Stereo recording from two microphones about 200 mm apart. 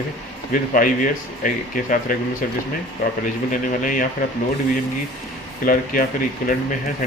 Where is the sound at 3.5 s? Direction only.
40° left (ahead or behind).